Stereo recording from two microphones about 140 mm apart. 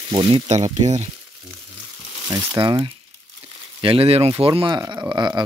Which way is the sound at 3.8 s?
40° right (ahead or behind).